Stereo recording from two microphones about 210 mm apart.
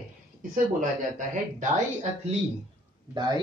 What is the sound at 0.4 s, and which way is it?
Speech, 40° right (ahead or behind).